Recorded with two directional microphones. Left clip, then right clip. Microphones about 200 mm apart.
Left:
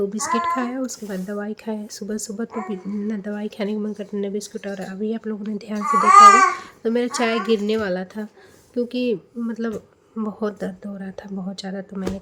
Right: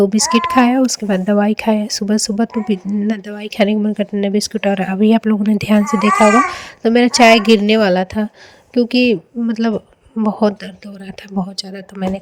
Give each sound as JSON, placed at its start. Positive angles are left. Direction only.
{"t": 0.0, "sound": "a woman's voice", "side_deg": -35}